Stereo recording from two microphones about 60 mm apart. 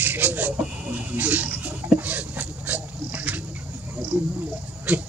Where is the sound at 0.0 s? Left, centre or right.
Right.